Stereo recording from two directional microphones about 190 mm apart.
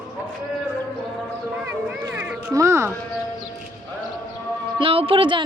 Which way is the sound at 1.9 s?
10° right (ahead or behind).